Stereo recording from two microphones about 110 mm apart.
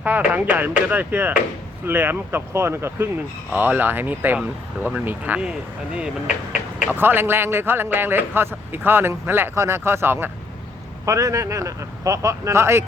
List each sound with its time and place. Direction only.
0.0 s a man's voice: 15° right (ahead or behind)
6.7 s a man's voice: 15° right (ahead or behind)